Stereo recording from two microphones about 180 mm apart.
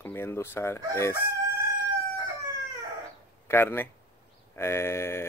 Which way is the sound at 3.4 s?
10° left (ahead or behind).